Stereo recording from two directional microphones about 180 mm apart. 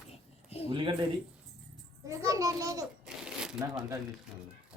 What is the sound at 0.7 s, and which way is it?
Speech, 25° right (ahead or behind).